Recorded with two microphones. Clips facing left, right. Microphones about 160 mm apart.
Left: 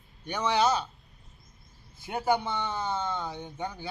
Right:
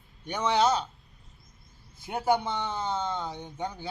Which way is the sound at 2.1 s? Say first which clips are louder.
Right 1 dB; 10° right (ahead or behind).